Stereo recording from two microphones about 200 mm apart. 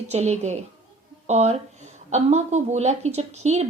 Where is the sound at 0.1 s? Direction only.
35° right (ahead or behind).